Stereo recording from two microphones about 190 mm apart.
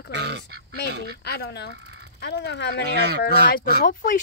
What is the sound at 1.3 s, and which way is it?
Speech, 60° left (ahead or behind).